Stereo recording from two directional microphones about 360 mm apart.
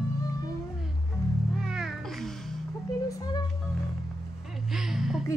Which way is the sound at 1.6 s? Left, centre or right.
Centre.